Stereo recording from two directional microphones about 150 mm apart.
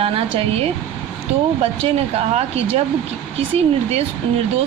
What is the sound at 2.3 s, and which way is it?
Speech, 45° right (ahead or behind).